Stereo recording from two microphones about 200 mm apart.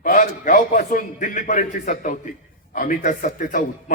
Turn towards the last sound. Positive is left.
turn(degrees=40)  # may be behind; listen again after turning